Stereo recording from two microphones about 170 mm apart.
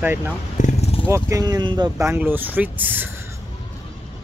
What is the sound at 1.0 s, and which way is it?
Speech, 15° right (ahead or behind).